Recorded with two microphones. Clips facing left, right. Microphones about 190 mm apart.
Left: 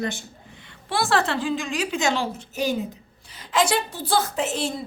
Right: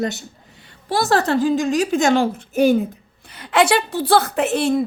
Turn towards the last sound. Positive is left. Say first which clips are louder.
# right 8 dB
turn(degrees=-60)  # may be behind; listen again after turning